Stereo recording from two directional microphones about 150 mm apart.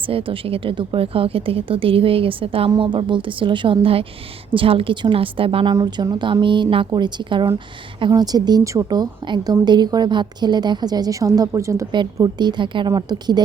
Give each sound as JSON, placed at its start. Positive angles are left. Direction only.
{"t": 0.0, "sound": "a woman's voice", "side_deg": -35}